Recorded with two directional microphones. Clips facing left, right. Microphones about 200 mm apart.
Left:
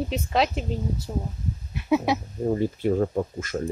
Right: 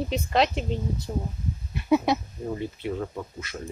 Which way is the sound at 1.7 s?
5° left (ahead or behind).